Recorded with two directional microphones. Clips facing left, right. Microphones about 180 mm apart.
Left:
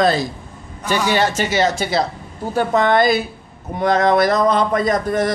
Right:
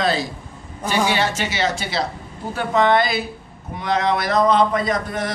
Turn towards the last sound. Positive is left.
turn(degrees=45)  # may be behind; listen again after turning